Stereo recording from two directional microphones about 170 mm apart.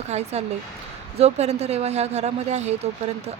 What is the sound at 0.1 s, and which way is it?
Speech, 40° right (ahead or behind).